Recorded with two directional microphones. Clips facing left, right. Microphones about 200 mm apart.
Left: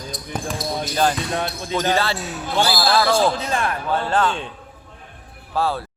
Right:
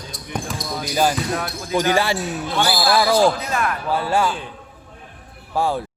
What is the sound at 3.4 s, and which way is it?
Speech, 30° left (ahead or behind).